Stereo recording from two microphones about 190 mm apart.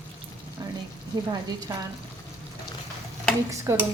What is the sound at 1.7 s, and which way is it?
Speech, 20° right (ahead or behind).